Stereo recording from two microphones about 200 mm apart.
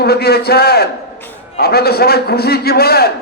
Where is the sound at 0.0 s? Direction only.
55° left (ahead or behind).